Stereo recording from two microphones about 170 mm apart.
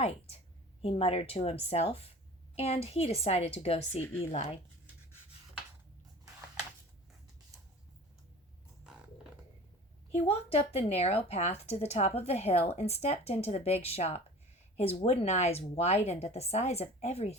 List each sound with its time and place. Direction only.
0.0 s a woman's voice: 35° left (ahead or behind)
10.1 s speech: 35° left (ahead or behind)